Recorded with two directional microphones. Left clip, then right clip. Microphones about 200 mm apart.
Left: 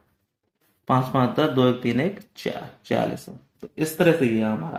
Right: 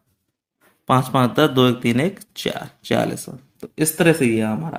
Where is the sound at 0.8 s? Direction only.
40° right (ahead or behind).